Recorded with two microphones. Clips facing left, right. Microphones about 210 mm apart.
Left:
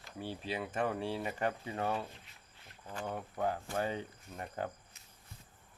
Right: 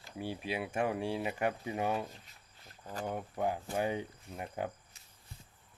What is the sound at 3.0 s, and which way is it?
Speech, 10° right (ahead or behind).